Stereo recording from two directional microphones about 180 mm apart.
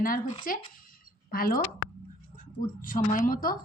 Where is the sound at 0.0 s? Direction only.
50° left (ahead or behind).